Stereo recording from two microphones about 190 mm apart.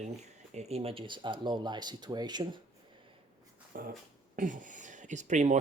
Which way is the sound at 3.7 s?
50° right (ahead or behind).